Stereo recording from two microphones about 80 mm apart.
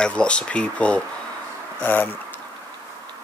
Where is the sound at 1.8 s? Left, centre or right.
Left.